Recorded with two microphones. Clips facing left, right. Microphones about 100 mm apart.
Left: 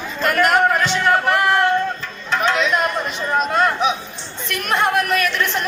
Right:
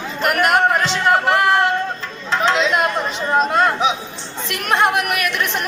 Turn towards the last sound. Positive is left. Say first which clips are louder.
# right 1 dB
turn(degrees=-20)  # may be behind; listen again after turning